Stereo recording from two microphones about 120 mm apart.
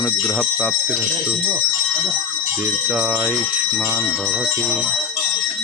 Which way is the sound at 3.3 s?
5° right (ahead or behind).